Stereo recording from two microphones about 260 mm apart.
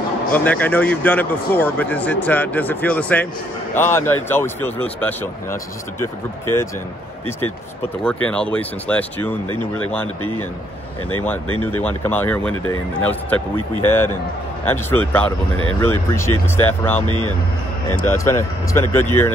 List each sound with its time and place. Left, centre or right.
0.3 s speech: centre
8.0 s speech: centre
11.4 s speech: left
11.8 s speech: centre